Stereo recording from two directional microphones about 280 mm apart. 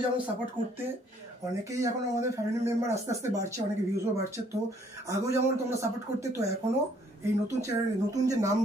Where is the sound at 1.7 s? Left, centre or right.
Centre.